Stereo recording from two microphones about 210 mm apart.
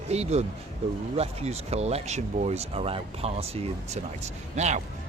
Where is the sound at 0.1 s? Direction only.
30° right (ahead or behind).